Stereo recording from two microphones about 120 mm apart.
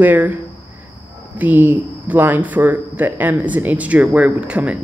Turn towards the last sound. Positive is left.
turn(degrees=-10)  # may be behind; listen again after turning